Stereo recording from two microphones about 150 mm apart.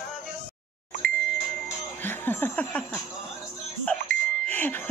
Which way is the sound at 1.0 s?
75° right (ahead or behind).